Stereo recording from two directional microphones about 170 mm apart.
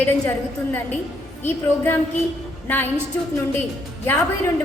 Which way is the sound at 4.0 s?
15° left (ahead or behind).